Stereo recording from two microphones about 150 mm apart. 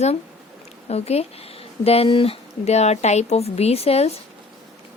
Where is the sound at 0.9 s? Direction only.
45° left (ahead or behind).